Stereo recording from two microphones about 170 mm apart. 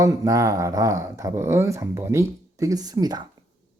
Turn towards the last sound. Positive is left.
turn(degrees=-20)  # may be behind; listen again after turning